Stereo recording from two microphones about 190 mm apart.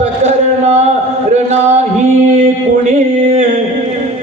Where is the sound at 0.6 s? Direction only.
35° right (ahead or behind).